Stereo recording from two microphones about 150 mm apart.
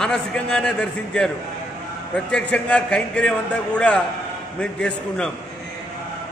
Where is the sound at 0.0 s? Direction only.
5° left (ahead or behind).